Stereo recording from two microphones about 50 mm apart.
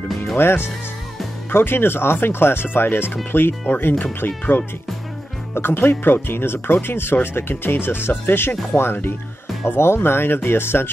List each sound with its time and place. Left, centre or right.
0.4 s speech: left